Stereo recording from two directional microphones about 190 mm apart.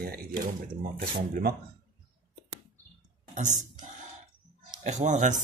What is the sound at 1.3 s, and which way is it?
Speech, 55° right (ahead or behind).